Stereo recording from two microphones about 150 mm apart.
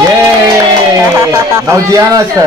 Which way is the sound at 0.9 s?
20° right (ahead or behind).